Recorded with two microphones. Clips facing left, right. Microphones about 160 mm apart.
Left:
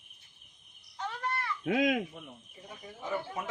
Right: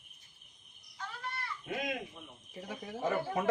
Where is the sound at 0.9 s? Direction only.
70° left (ahead or behind); by 2.0 s 90° left.